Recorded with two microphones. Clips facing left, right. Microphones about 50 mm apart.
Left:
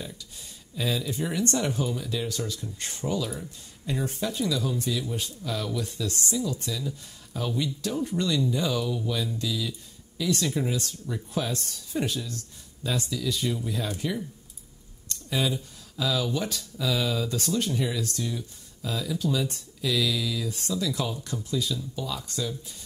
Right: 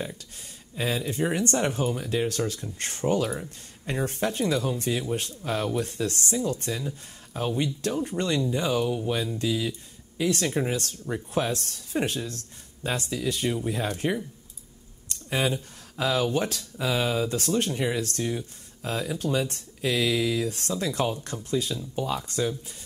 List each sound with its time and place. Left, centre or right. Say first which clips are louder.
0.0 s speech: right 4 dB; right